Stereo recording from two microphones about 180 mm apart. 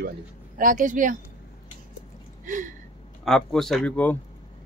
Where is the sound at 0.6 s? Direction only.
45° right (ahead or behind).